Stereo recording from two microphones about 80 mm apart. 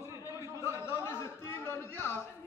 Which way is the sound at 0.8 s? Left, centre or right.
Left.